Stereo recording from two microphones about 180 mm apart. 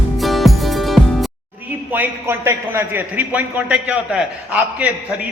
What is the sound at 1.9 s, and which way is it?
A man's voice, 10° right (ahead or behind).